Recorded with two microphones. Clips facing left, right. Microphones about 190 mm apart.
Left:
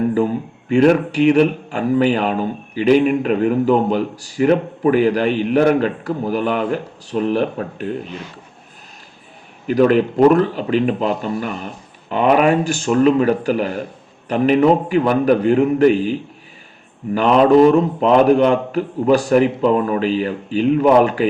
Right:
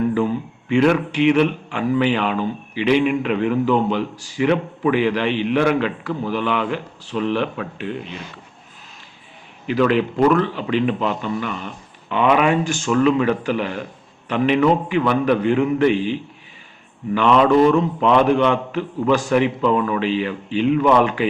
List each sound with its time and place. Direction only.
0.1 s speech: 40° left (ahead or behind)
9.6 s speech: 45° left (ahead or behind)